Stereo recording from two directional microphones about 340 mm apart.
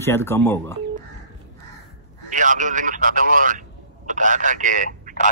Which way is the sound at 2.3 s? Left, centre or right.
Right.